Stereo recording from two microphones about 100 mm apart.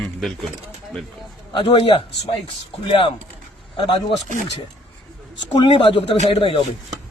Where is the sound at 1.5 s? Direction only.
60° left (ahead or behind).